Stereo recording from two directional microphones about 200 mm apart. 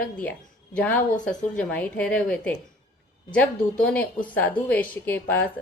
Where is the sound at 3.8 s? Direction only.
5° left (ahead or behind).